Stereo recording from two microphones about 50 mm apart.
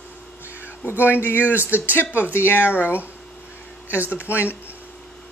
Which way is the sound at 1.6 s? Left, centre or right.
Right.